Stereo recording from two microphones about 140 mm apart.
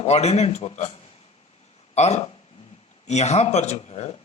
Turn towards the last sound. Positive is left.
turn(degrees=50)  # may be behind; listen again after turning